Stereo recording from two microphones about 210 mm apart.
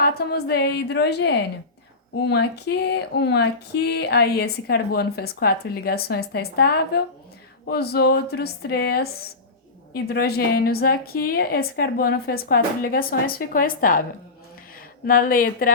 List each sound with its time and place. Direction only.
0.0 s speech: 50° left (ahead or behind)
15.0 s speech: 40° left (ahead or behind)